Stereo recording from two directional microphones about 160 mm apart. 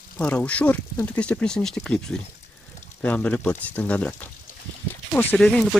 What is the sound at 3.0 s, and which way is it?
Speech, 10° left (ahead or behind).